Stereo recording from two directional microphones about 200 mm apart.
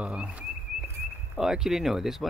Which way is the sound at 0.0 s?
5° right (ahead or behind).